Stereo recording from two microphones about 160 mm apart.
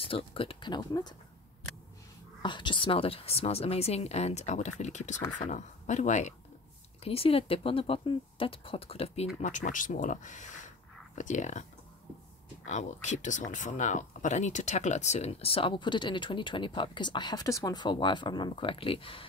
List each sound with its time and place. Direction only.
0.0 s speech: 35° left (ahead or behind)
2.4 s speech: 30° left (ahead or behind); by 6.3 s 50° left (ahead or behind)
7.0 s speech: 35° left (ahead or behind)
9.4 s speech: 50° left (ahead or behind)
12.6 s speech: 45° left (ahead or behind)